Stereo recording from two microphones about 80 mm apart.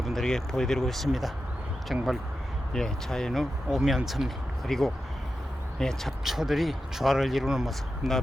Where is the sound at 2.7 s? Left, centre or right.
Centre.